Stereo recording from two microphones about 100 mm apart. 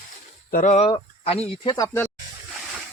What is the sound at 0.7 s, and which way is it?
Speech, 75° left (ahead or behind).